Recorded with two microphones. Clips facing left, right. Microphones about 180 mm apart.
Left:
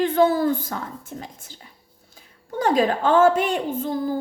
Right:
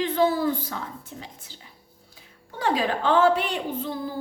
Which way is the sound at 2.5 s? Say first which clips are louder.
Left 5 dB; 45° left (ahead or behind).